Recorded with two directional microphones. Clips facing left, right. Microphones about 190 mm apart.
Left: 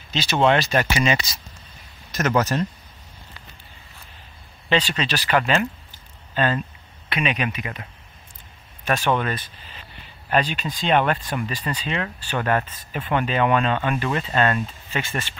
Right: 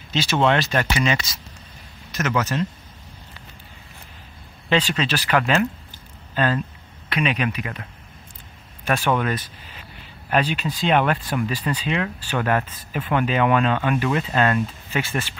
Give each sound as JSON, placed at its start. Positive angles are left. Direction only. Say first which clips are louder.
{"t": 0.1, "sound": "speech", "louder": "right 2 dB", "side_deg": -5}
{"t": 0.4, "sound": "speech", "louder": "left 2 dB", "side_deg": 5}
{"t": 2.1, "sound": "speech", "louder": "left 2 dB", "side_deg": 40}
{"t": 4.6, "sound": "speech", "louder": "right 1 dB", "side_deg": -5}
{"t": 7.1, "sound": "speech", "louder": "right 2 dB", "side_deg": 0}
{"t": 8.9, "sound": "speech", "louder": "even", "side_deg": -10}
{"t": 10.3, "sound": "speech", "louder": "right 1 dB", "side_deg": -10}